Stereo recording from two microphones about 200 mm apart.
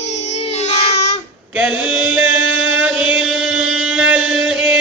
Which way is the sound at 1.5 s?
5° right (ahead or behind).